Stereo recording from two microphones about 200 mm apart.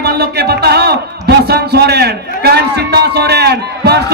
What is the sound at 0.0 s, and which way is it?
Music, 55° right (ahead or behind).